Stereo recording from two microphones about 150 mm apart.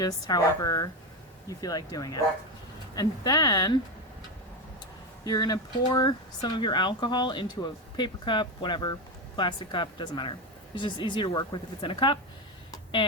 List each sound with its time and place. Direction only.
0.0 s speech: 25° left (ahead or behind)
5.2 s speech: 25° left (ahead or behind)
12.7 s a sound: 35° left (ahead or behind)